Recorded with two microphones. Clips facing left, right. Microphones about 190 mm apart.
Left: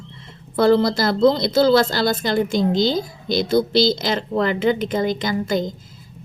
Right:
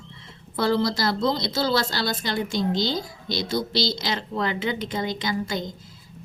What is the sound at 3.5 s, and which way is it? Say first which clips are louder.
Speech: left 9 dB; 50° left (ahead or behind).